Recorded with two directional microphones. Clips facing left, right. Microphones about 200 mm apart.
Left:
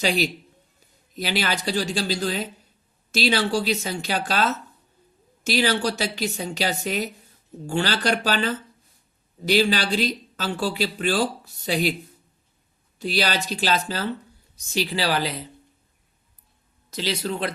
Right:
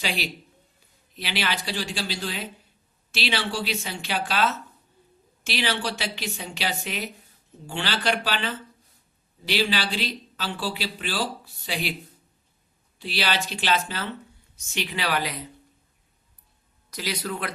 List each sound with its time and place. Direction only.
0.0 s speech: 40° left (ahead or behind)
13.0 s speech: 45° left (ahead or behind)
16.9 s a man's voice: 25° left (ahead or behind)